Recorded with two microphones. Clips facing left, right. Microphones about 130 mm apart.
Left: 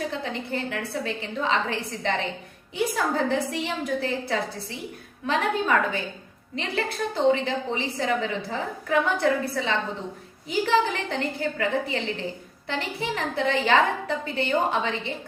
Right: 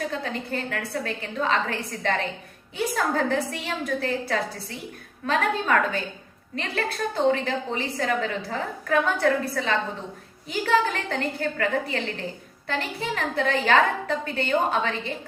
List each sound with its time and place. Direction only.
0.1 s a woman's voice: 20° left (ahead or behind)
7.3 s a woman's voice: 20° left (ahead or behind)